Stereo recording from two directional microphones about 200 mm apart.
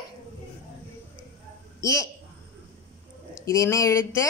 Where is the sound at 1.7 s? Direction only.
15° left (ahead or behind).